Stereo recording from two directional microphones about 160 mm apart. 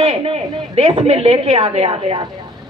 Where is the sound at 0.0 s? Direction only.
35° right (ahead or behind).